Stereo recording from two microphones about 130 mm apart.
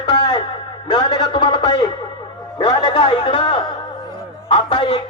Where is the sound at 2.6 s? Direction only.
35° left (ahead or behind).